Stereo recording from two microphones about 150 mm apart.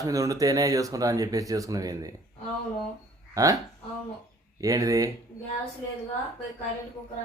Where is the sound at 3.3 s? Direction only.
25° right (ahead or behind).